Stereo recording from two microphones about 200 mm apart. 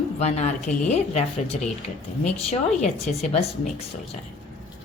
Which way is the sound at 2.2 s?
35° left (ahead or behind).